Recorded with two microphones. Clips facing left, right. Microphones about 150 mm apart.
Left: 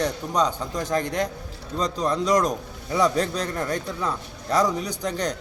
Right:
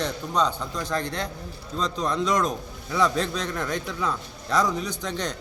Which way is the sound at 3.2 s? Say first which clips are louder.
Left 2 dB; 35° left (ahead or behind).